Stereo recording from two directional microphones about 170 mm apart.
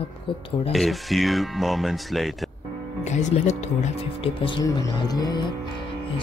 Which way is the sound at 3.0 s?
45° left (ahead or behind).